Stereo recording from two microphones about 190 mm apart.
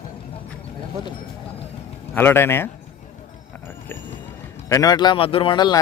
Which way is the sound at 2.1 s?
10° left (ahead or behind).